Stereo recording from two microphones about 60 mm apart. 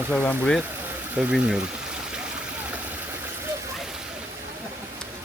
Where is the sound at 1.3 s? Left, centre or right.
Centre.